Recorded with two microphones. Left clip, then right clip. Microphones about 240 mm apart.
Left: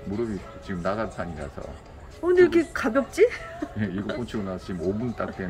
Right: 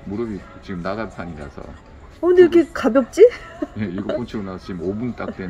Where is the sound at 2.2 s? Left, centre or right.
Right.